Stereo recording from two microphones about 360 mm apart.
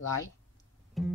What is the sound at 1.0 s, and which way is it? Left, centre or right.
Music, centre.